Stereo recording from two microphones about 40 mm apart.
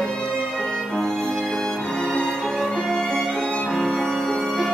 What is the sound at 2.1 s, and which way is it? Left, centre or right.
Music, centre.